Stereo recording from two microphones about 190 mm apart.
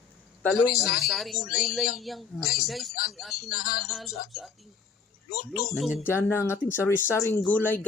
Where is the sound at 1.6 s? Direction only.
Centre (ahead or behind).